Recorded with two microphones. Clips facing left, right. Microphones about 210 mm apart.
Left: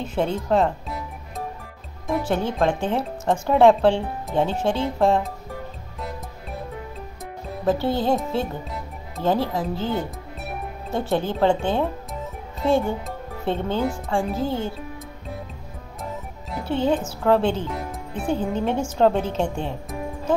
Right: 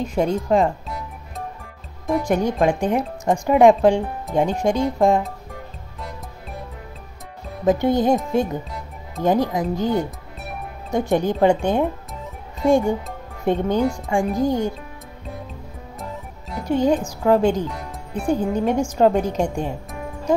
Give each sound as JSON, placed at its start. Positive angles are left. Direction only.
{"t": 0.0, "sound": "speech", "side_deg": -10}
{"t": 2.2, "sound": "speech", "side_deg": -15}
{"t": 7.6, "sound": "speech", "side_deg": -15}
{"t": 9.2, "sound": "speech", "side_deg": -15}
{"t": 16.6, "sound": "a woman's voice", "side_deg": -10}
{"t": 17.6, "sound": "music", "side_deg": 0}
{"t": 18.2, "sound": "speech", "side_deg": -10}